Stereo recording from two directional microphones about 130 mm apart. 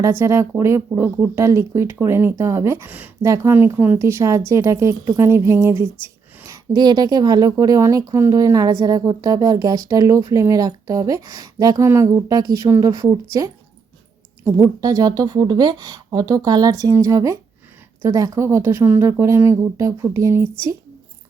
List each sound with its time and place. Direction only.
0.0 s a woman's voice: 20° right (ahead or behind)
6.7 s a woman's voice: 35° right (ahead or behind)
14.4 s a woman's voice: 20° right (ahead or behind)
14.8 s a woman's voice: 30° right (ahead or behind)